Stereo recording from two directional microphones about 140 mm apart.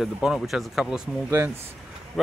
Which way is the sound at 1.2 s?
20° right (ahead or behind).